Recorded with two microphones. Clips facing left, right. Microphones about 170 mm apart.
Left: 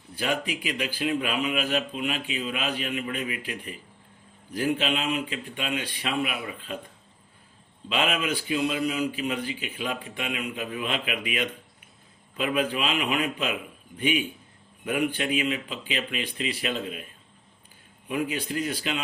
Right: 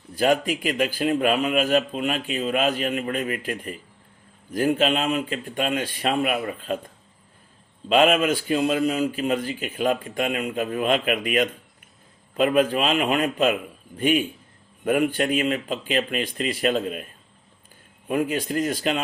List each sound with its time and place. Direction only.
0.2 s speech: 45° right (ahead or behind)
7.9 s speech: 45° right (ahead or behind)
18.1 s speech: 45° right (ahead or behind)